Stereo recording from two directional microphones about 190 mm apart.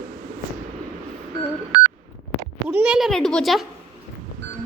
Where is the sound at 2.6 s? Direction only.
5° right (ahead or behind).